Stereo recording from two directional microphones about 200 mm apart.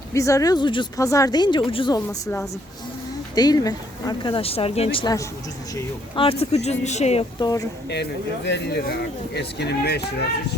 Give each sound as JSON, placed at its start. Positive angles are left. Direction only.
{"t": 0.1, "sound": "speech", "side_deg": 15}
{"t": 8.4, "sound": "speech", "side_deg": 60}